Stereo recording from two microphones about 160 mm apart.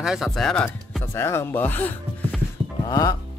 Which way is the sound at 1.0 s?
15° left (ahead or behind).